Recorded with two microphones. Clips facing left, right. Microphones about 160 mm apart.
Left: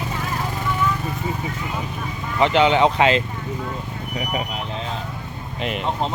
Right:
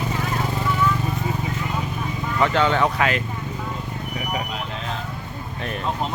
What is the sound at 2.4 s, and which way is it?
Speech, 20° left (ahead or behind).